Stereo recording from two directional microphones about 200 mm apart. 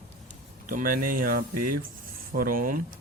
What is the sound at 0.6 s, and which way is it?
Speech, 45° right (ahead or behind).